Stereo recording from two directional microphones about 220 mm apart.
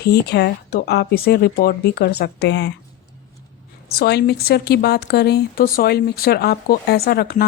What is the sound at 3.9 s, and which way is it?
Speech, 45° left (ahead or behind).